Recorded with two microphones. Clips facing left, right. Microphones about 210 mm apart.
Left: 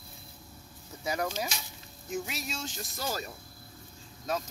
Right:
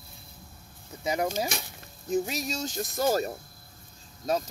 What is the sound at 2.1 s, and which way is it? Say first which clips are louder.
Speech: right 7 dB; 40° right (ahead or behind).